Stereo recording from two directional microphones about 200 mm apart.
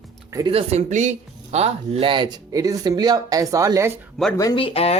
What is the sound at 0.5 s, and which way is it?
Speech, 30° right (ahead or behind).